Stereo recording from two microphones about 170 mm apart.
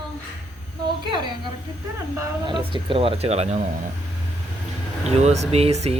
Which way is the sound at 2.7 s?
30° right (ahead or behind).